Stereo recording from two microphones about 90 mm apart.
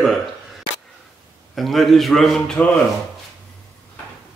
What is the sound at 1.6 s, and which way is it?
Speech, centre (ahead or behind).